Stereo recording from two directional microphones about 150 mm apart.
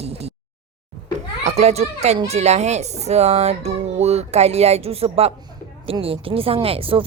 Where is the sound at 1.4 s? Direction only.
45° right (ahead or behind).